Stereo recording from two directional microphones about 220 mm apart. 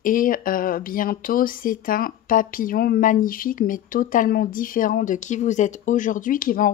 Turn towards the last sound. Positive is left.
turn(degrees=40)  # may be behind; listen again after turning